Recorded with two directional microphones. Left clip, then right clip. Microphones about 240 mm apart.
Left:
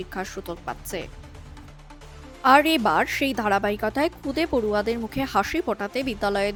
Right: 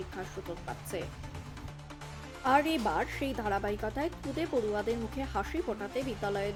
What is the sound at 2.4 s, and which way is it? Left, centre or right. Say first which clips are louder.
Speech: left 10 dB; left.